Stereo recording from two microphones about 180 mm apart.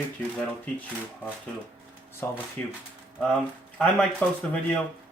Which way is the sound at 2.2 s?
10° left (ahead or behind).